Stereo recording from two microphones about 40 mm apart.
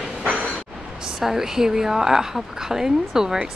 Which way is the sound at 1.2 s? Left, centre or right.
Centre.